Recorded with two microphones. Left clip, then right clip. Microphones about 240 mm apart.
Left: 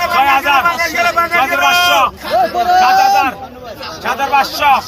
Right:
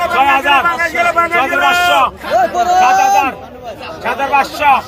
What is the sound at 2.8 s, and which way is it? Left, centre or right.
A man's voice, left.